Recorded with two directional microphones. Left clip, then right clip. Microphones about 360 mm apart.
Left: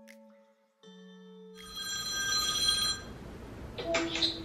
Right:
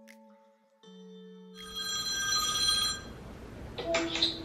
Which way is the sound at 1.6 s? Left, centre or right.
Centre.